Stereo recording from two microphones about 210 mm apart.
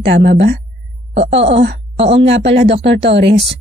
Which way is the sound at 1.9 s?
30° right (ahead or behind).